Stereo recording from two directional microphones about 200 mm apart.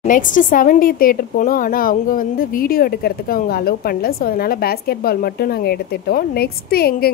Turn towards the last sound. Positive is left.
turn(degrees=50)  # may be behind; listen again after turning